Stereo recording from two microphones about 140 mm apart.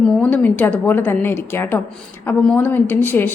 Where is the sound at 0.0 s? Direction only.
5° left (ahead or behind).